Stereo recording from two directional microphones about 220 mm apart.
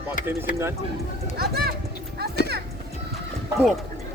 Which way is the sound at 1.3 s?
45° right (ahead or behind).